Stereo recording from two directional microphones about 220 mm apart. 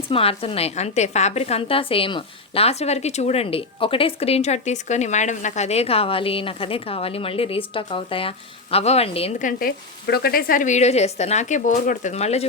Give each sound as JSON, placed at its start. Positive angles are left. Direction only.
{"t": 0.1, "sound": "a woman's voice", "side_deg": 25}